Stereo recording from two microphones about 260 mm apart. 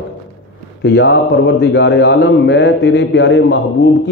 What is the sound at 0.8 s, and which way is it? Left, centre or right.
A man's voice, left.